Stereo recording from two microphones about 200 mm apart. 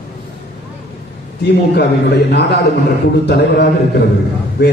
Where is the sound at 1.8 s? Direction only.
55° left (ahead or behind).